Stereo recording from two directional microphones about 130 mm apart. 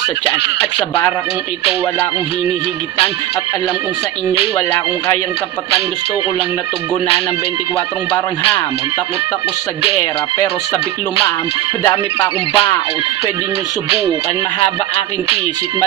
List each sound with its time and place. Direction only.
12.2 s music: 45° left (ahead or behind)